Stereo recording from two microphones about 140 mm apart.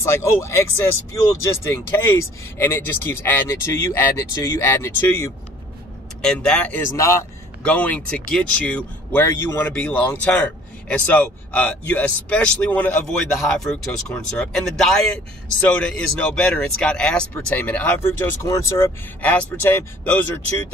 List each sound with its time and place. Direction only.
0.0 s speech: 20° left (ahead or behind)
6.2 s speech: 5° left (ahead or behind)
13.4 s speech: centre (ahead or behind)